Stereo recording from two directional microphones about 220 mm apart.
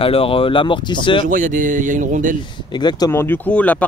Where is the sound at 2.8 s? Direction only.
20° left (ahead or behind).